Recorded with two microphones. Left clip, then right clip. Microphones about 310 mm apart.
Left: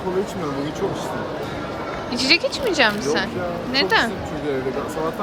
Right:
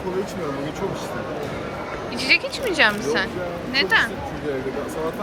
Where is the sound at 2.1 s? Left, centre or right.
Centre.